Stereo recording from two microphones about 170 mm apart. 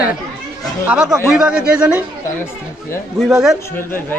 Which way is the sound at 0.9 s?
5° right (ahead or behind).